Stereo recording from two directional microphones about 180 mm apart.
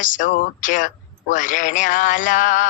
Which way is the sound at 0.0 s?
45° left (ahead or behind).